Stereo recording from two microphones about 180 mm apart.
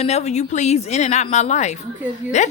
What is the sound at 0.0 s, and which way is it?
A woman's voice, 35° left (ahead or behind).